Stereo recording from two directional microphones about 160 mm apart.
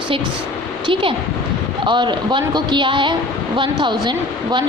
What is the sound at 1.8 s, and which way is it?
A woman's voice, 30° right (ahead or behind).